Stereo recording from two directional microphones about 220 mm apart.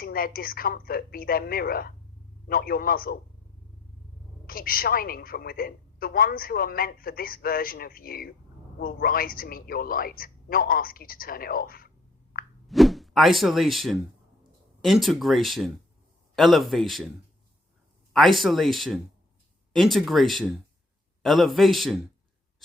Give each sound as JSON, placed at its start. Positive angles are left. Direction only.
{"t": 0.0, "sound": "a woman's voice", "side_deg": 40}
{"t": 4.4, "sound": "a woman's voice", "side_deg": 40}
{"t": 12.6, "sound": "speech", "side_deg": 0}
{"t": 18.1, "sound": "speech", "side_deg": 0}